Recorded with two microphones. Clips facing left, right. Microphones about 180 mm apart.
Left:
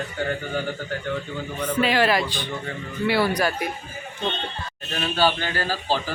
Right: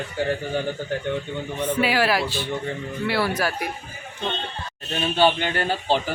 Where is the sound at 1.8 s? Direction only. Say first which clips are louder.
Left 2 dB; 10° right (ahead or behind).